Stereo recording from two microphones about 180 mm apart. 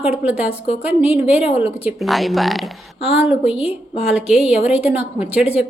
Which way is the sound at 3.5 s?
30° left (ahead or behind).